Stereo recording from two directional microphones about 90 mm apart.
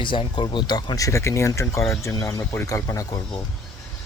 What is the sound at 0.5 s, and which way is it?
Speech, 55° left (ahead or behind).